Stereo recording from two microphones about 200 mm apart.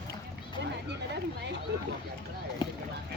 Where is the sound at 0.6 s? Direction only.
60° right (ahead or behind).